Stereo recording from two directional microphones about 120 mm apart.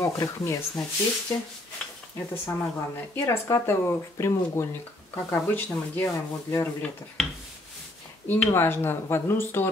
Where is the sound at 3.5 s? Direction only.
20° left (ahead or behind).